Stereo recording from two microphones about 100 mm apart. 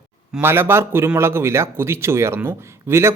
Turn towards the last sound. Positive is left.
turn(degrees=-25)  # may be behind; listen again after turning